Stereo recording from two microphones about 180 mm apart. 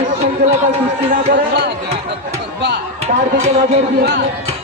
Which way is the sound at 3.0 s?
35° right (ahead or behind).